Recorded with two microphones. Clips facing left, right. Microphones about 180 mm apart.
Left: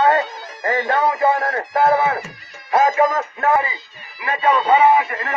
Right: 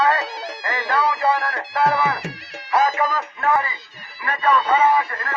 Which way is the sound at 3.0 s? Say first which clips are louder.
Left 6 dB; 45° left (ahead or behind).